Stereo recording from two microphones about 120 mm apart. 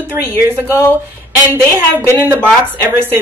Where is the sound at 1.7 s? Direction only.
20° right (ahead or behind).